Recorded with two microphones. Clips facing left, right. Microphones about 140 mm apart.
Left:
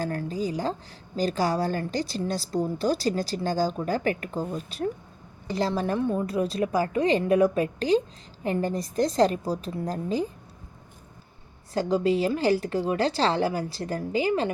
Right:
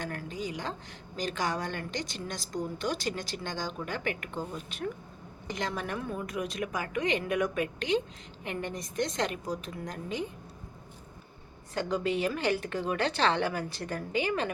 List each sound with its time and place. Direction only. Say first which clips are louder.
0.0 s a woman's voice: left 7 dB; 35° left (ahead or behind)
11.7 s a woman's voice: left 7 dB; 30° left (ahead or behind)